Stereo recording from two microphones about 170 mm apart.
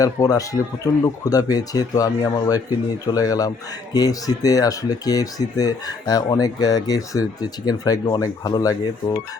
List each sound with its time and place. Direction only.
0.0 s speech: 20° left (ahead or behind)